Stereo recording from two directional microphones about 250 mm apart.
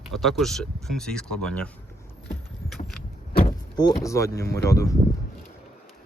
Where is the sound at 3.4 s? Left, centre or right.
Centre.